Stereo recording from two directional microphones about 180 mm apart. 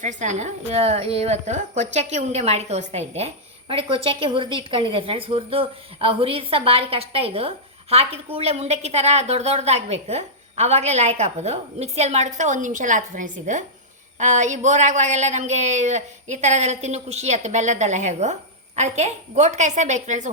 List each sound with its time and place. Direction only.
0.0 s a woman's voice: 40° right (ahead or behind)